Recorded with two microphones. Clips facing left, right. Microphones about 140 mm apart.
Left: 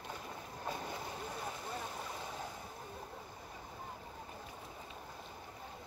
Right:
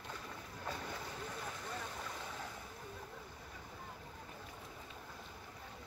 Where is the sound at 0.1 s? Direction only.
30° left (ahead or behind).